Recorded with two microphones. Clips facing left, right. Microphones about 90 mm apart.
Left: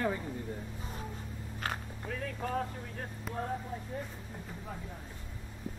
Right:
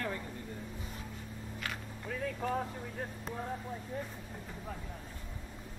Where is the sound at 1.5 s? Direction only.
40° left (ahead or behind).